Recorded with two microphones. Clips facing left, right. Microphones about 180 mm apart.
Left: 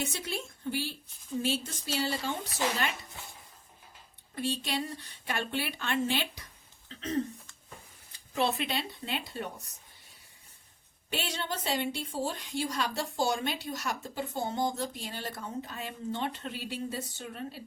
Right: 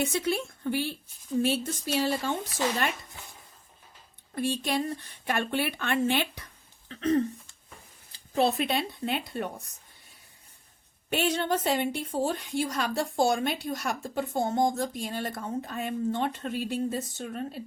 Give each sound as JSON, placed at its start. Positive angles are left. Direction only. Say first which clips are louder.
{"t": 0.0, "sound": "a woman's voice", "louder": "right 8 dB", "side_deg": -60}
{"t": 4.4, "sound": "a woman's voice", "louder": "right 4 dB", "side_deg": -50}
{"t": 6.8, "sound": "a sound", "louder": "right 10 dB", "side_deg": -60}
{"t": 8.1, "sound": "a sound", "louder": "right 5 dB", "side_deg": -35}
{"t": 8.6, "sound": "a woman's voice", "louder": "right 6 dB", "side_deg": -55}
{"t": 11.1, "sound": "a woman's voice", "louder": "right 9 dB", "side_deg": -55}